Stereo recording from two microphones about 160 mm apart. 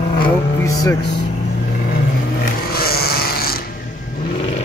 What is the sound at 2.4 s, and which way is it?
Snoring, 70° left (ahead or behind).